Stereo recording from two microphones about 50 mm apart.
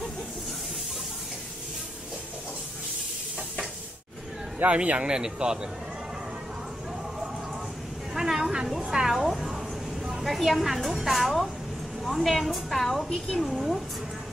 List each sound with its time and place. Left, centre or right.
4.6 s speech: right
8.1 s a sound: centre
9.0 s a woman's voice: centre